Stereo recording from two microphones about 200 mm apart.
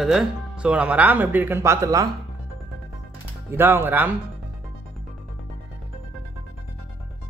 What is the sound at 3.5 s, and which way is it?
Speech, 10° right (ahead or behind).